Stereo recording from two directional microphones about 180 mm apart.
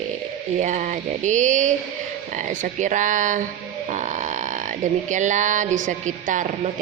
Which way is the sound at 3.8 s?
40° right (ahead or behind).